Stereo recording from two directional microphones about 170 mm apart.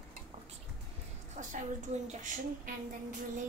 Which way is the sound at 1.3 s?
45° right (ahead or behind).